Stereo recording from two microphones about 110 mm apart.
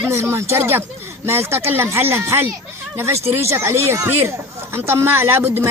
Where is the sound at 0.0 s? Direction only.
25° right (ahead or behind).